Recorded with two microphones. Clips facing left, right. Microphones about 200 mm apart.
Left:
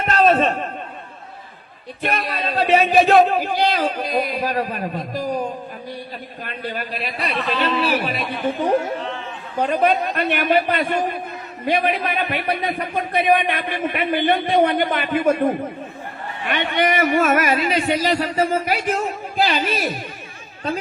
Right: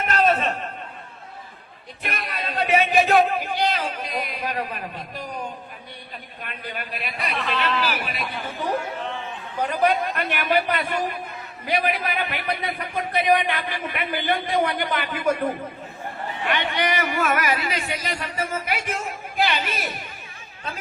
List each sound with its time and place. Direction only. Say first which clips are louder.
0.0 s a sound: left 5 dB; 30° left (ahead or behind)
2.0 s speech: left 7 dB; 30° left (ahead or behind)
9.6 s a man's voice: left 3 dB; 25° left (ahead or behind)